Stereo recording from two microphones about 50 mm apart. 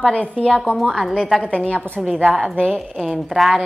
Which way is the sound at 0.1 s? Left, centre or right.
Left.